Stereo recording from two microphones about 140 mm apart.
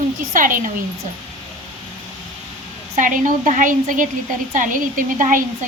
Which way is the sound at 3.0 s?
65° right (ahead or behind).